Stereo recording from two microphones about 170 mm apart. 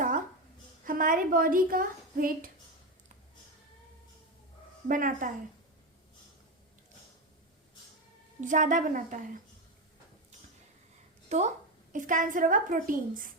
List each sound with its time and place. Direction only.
0.9 s a woman's voice: 55° right (ahead or behind)
4.9 s a woman's voice: 50° right (ahead or behind)
8.4 s a woman's voice: 50° right (ahead or behind)
11.3 s a woman's voice: 45° right (ahead or behind)